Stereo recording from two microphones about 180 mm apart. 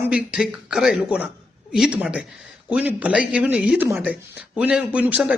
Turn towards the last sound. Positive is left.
turn(degrees=-5)  # may be behind; listen again after turning